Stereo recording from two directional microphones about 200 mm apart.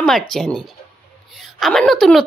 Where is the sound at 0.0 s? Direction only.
Centre (ahead or behind).